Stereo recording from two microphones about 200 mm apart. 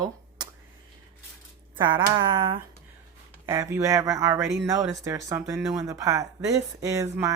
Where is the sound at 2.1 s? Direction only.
25° right (ahead or behind).